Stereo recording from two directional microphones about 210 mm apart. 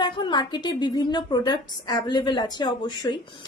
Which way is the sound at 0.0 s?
20° left (ahead or behind).